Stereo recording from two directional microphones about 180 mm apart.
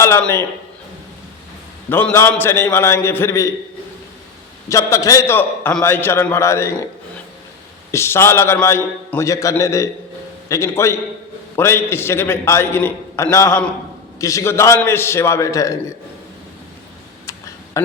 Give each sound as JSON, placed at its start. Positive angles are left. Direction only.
{"t": 0.0, "sound": "a man's voice", "side_deg": 15}
{"t": 1.9, "sound": "a man's voice", "side_deg": 10}
{"t": 4.7, "sound": "a man's voice", "side_deg": 15}
{"t": 7.9, "sound": "a man's voice", "side_deg": 15}
{"t": 17.7, "sound": "speech", "side_deg": 15}